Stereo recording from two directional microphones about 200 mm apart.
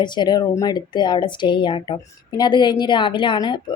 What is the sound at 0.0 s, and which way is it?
A woman's voice, 20° left (ahead or behind).